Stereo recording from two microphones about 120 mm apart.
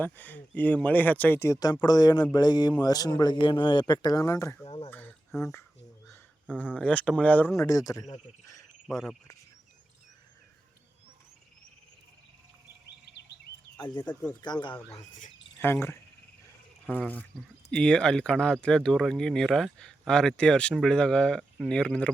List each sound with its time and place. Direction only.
0.0 s speech: 15° left (ahead or behind)
4.6 s speech: 50° left (ahead or behind)
4.9 s a sound: 15° left (ahead or behind)
5.4 s speech: 25° left (ahead or behind)
6.5 s speech: 10° left (ahead or behind)
7.5 s speech: 25° left (ahead or behind)
8.9 s speech: centre (ahead or behind)
13.7 s speech: 35° left (ahead or behind)
15.5 s speech: 20° left (ahead or behind)